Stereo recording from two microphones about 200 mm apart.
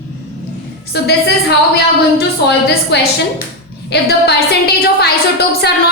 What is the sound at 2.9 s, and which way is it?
A woman's voice, 55° left (ahead or behind).